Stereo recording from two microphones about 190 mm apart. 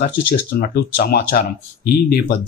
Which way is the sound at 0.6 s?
55° left (ahead or behind).